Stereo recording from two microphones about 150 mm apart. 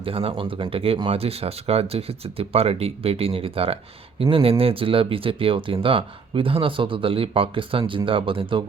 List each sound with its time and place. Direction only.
0.0 s speech: 40° right (ahead or behind)